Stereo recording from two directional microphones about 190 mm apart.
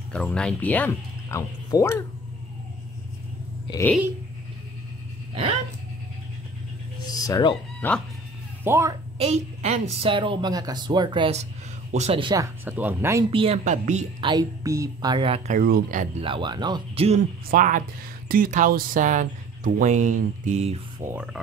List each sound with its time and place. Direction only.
0.1 s speech: 5° left (ahead or behind)
5.3 s speech: 30° right (ahead or behind)
7.1 s speech: 20° left (ahead or behind)
8.6 s speech: 15° right (ahead or behind)
9.2 s a woman's voice: 35° right (ahead or behind)
12.6 s speech: 10° right (ahead or behind)
13.3 s speech: 30° right (ahead or behind)
14.2 s a woman's voice: 20° right (ahead or behind); by 16.3 s 40° right (ahead or behind)
16.3 s a woman's voice: 25° right (ahead or behind)
17.5 s speech: 45° right (ahead or behind)
21.0 s speech: 10° right (ahead or behind)